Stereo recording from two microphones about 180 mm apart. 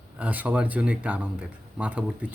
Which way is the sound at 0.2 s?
10° right (ahead or behind).